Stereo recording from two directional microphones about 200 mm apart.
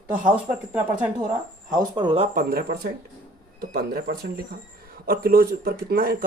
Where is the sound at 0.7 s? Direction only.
5° right (ahead or behind).